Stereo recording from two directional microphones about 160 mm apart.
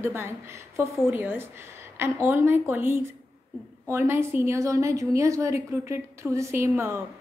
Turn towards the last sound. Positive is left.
turn(degrees=-15)  # may be behind; listen again after turning